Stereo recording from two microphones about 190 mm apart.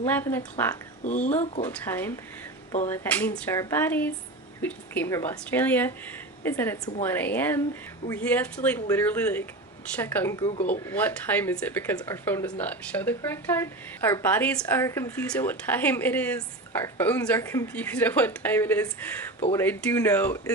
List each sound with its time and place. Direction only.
0.0 s speech: 10° left (ahead or behind)
1.0 s speech: 40° left (ahead or behind)
1.6 s speech: 10° left (ahead or behind)